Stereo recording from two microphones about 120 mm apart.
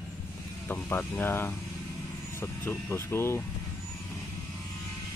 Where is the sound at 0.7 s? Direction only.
15° left (ahead or behind).